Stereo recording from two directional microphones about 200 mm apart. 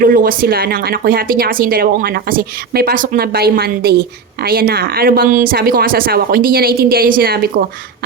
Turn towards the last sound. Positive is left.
turn(degrees=-50)  # may be behind; listen again after turning